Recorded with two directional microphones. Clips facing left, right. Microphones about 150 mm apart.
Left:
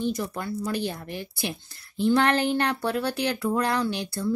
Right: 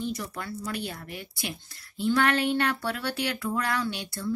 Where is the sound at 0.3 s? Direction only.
30° left (ahead or behind).